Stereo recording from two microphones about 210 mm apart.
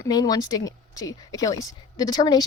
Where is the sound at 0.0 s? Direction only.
20° left (ahead or behind).